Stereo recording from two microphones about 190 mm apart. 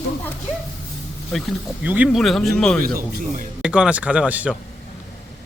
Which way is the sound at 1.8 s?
10° right (ahead or behind).